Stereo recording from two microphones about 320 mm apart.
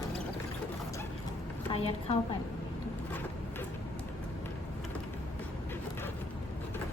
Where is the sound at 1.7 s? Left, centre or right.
Centre.